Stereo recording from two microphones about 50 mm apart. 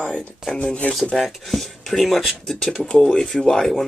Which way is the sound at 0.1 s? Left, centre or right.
Centre.